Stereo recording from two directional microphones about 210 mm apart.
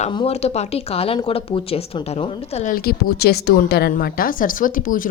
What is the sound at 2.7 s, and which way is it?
A woman's voice, 45° left (ahead or behind).